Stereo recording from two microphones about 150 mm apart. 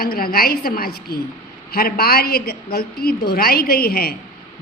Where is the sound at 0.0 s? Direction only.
80° left.